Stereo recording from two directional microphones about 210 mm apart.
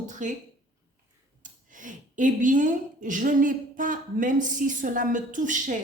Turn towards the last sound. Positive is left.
turn(degrees=-35)  # may be behind; listen again after turning